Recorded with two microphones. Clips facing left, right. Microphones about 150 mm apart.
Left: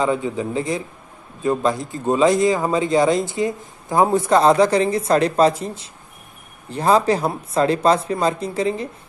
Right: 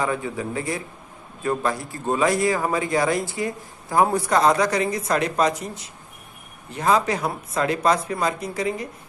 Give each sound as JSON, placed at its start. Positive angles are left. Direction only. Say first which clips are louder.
{"t": 0.0, "sound": "a man's voice", "louder": "left 5 dB", "side_deg": 20}